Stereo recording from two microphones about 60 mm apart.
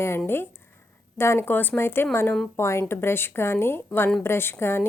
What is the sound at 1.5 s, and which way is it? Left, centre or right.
A woman's voice, left.